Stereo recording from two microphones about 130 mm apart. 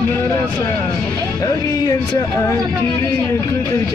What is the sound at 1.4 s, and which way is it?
Speech, 25° left (ahead or behind).